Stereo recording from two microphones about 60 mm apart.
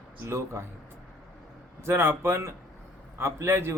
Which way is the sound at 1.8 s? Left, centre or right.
Right.